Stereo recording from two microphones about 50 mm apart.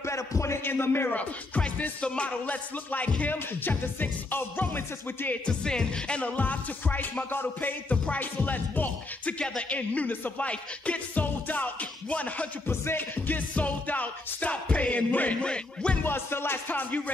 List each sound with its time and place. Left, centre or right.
0.0 s a sound: left
0.7 s music: left
1.8 s music: left
5.4 s music: centre; by 7.7 s left
7.9 s music: left
12.6 s music: left
13.6 s music: left
15.4 s music: left
16.0 s music: left